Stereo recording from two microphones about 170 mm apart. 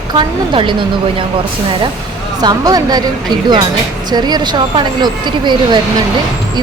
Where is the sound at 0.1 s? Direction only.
30° right (ahead or behind).